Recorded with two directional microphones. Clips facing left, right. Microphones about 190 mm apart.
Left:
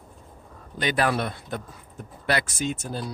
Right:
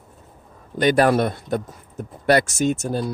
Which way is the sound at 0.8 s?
50° right (ahead or behind).